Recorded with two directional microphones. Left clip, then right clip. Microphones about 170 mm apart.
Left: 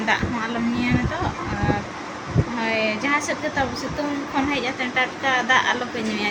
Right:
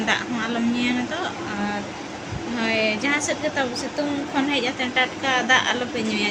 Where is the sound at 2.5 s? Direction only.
15° right (ahead or behind).